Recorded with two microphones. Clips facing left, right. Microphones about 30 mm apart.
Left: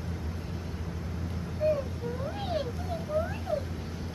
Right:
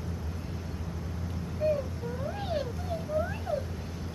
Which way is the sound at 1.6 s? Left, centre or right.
Centre.